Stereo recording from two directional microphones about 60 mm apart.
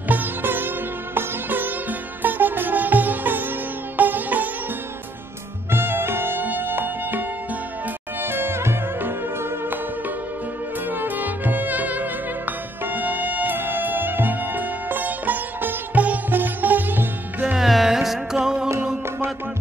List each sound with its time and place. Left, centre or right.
0.1 s sitar: right
5.7 s music: right
17.6 s music: centre